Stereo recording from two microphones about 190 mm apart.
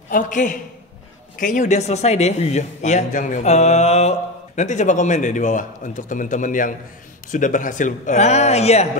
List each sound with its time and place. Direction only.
0.1 s a man's voice: 45° left (ahead or behind)